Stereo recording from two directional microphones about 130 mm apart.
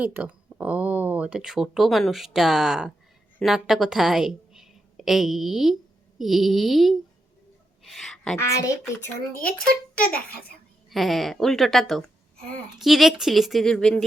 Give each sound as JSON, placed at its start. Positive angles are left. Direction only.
{"t": 0.0, "sound": "a woman's voice", "side_deg": -10}
{"t": 7.9, "sound": "a sound", "side_deg": 0}
{"t": 8.4, "sound": "speech", "side_deg": 25}
{"t": 10.0, "sound": "a child's voice", "side_deg": 10}
{"t": 10.8, "sound": "a woman's voice", "side_deg": 0}